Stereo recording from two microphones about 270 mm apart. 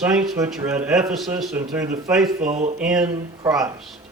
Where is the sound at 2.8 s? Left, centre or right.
Centre.